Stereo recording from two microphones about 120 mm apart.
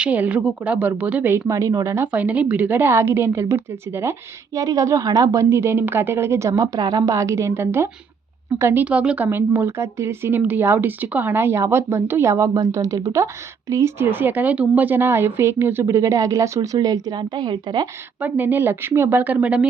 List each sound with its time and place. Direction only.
0.0 s a woman's voice: 10° right (ahead or behind)
2.1 s speech: 10° right (ahead or behind)
8.8 s speech: 10° right (ahead or behind); by 17.8 s 40° right (ahead or behind)
18.2 s a woman's voice: 15° right (ahead or behind)